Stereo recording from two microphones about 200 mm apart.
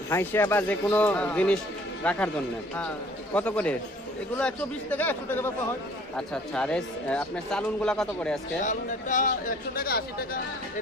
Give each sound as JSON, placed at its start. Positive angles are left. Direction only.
{"t": 0.1, "sound": "speech", "side_deg": 10}
{"t": 3.3, "sound": "speech", "side_deg": 5}
{"t": 8.6, "sound": "speech", "side_deg": 40}